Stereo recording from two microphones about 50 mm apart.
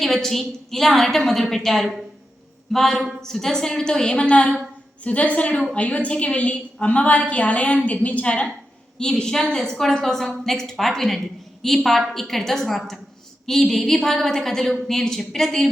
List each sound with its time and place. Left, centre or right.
0.0 s a woman's voice: centre